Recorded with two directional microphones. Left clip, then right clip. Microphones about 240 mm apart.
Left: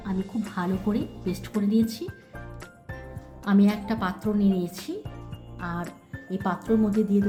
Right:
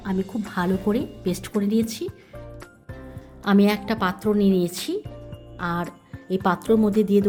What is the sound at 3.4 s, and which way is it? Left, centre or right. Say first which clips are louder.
A woman's voice: right 5 dB; right.